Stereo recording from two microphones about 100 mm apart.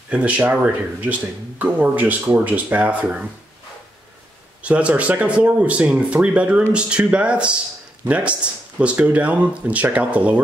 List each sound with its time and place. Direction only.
0.1 s speech: 15° right (ahead or behind)
1.6 s speech: 15° right (ahead or behind)
4.6 s speech: 15° right (ahead or behind)